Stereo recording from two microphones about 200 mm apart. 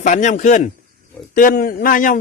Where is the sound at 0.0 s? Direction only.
35° left (ahead or behind).